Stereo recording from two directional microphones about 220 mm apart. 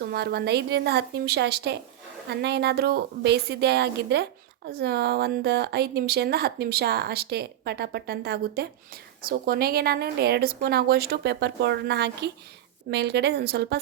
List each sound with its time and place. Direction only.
0.0 s a woman's voice: 45° right (ahead or behind)